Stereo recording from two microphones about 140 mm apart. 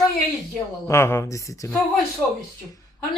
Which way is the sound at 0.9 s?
20° left (ahead or behind).